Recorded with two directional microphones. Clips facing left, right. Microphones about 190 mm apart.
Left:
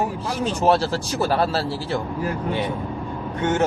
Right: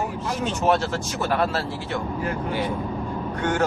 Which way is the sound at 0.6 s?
35° left (ahead or behind).